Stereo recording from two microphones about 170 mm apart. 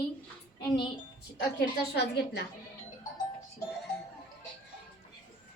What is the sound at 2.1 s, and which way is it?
Speech, 75° left (ahead or behind).